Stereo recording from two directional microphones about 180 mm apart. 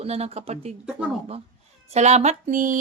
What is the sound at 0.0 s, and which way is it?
Speech, 35° right (ahead or behind).